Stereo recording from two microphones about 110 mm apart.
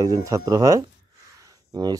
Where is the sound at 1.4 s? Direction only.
35° right (ahead or behind).